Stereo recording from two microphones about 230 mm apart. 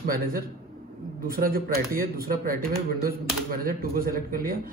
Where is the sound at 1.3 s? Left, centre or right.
Right.